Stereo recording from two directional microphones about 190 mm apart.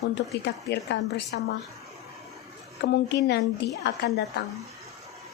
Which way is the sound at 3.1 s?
60° left (ahead or behind).